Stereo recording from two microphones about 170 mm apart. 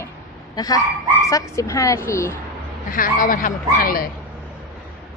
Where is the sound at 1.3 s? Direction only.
20° left (ahead or behind).